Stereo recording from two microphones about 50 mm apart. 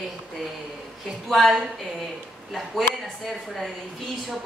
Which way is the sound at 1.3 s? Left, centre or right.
Centre.